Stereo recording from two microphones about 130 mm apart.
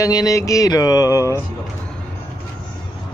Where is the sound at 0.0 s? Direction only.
25° left (ahead or behind).